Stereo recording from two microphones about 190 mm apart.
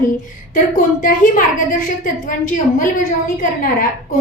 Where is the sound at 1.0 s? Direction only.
45° left (ahead or behind).